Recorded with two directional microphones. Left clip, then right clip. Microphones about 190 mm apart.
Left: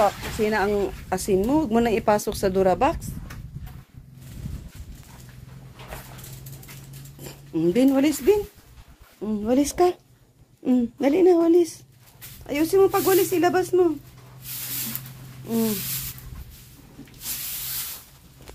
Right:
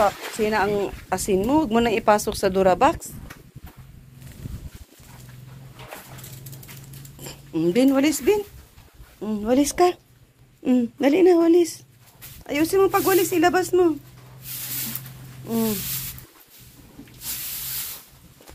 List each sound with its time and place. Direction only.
0.4 s a woman's voice: 20° left (ahead or behind)
7.2 s speech: 15° left (ahead or behind)
9.2 s a woman's voice: 5° left (ahead or behind)
15.4 s a sound: 5° right (ahead or behind)